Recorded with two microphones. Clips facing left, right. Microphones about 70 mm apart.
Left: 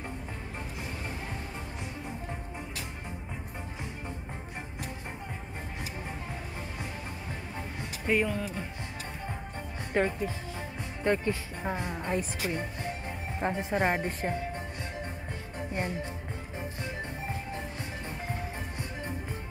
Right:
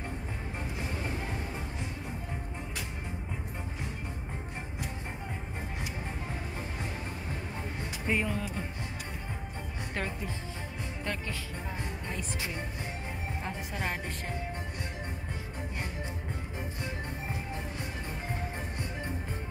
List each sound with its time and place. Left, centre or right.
8.1 s speech: centre
9.9 s speech: centre
11.1 s speech: left
11.6 s music: left
13.4 s speech: left